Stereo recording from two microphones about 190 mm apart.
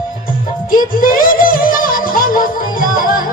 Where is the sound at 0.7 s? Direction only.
45° left (ahead or behind).